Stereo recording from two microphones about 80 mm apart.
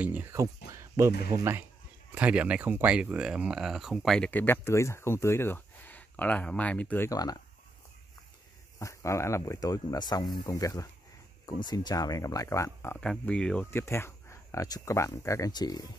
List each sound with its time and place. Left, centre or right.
0.0 s speech: right
0.3 s speech: right
2.1 s speech: centre
4.3 s speech: left
7.1 s speech: left
8.7 s speech: left
11.4 s speech: left
13.2 s speech: centre
13.7 s speech: left
15.5 s speech: left